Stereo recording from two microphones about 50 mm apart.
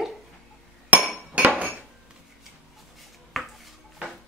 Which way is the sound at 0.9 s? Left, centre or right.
Right.